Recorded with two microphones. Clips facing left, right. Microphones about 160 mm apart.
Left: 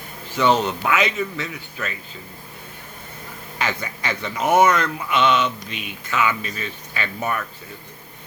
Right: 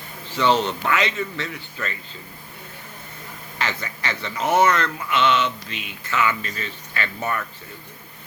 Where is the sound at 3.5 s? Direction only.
15° left (ahead or behind).